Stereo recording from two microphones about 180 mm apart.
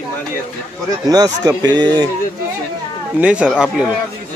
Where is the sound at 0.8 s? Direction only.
20° right (ahead or behind).